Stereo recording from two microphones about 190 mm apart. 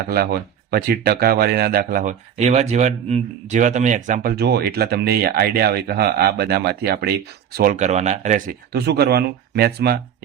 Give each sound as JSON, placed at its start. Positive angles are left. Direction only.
{"t": 0.7, "sound": "speech", "side_deg": -55}
{"t": 8.7, "sound": "speech", "side_deg": -55}